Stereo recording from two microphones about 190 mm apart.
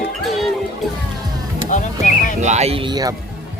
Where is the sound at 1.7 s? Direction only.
40° left (ahead or behind).